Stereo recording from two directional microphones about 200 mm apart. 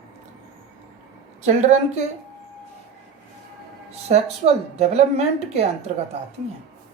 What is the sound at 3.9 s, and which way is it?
A woman's voice, 30° right (ahead or behind).